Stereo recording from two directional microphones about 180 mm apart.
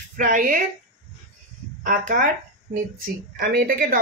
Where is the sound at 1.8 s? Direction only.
50° right (ahead or behind).